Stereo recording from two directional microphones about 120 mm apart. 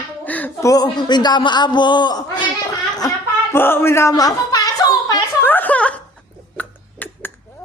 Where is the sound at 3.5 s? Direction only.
20° left (ahead or behind).